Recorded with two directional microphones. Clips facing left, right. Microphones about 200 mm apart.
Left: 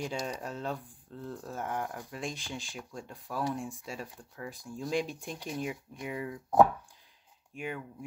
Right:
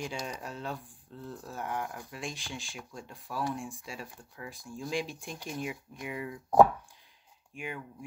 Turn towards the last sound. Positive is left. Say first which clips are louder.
# left 2 dB
turn(degrees=40)  # may be behind; listen again after turning